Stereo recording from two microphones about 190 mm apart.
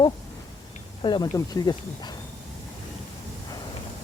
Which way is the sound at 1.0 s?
25° left (ahead or behind).